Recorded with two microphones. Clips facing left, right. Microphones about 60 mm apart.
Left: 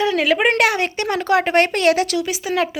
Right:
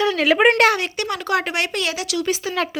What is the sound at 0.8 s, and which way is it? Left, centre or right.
Speech, left.